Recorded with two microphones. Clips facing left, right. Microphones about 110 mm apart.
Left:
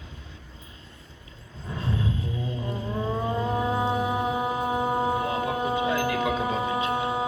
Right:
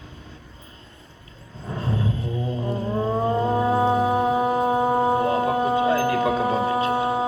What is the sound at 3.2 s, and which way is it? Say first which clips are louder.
Mantra: right 6 dB; 40° right (ahead or behind).